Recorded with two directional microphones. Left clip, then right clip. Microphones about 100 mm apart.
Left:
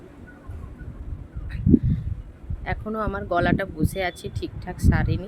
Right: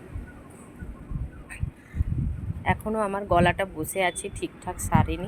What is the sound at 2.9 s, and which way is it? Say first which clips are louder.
Speech: even; 5° left (ahead or behind).